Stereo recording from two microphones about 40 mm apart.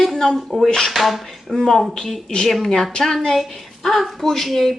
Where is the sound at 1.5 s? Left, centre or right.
Centre.